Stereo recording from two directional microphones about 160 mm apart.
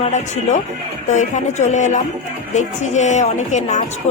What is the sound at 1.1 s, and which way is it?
A woman's voice, 45° left (ahead or behind).